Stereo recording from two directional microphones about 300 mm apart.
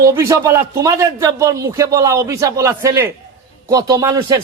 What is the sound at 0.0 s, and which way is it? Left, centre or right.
Speech, centre.